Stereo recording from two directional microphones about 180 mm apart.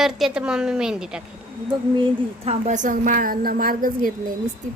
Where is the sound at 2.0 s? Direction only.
35° right (ahead or behind); by 4.1 s 50° right (ahead or behind).